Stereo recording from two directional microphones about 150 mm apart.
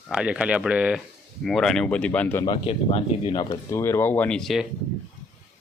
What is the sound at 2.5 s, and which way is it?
Speech, 40° left (ahead or behind).